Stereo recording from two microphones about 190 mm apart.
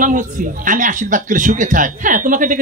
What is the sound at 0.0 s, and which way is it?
A man's voice, 45° right (ahead or behind).